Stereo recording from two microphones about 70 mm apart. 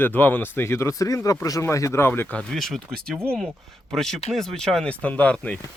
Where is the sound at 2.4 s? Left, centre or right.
Centre.